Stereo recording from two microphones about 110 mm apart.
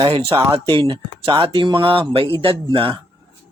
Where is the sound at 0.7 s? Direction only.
55° right (ahead or behind).